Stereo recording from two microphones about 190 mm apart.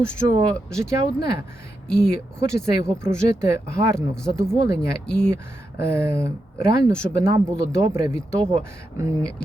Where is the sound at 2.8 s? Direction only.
15° right (ahead or behind).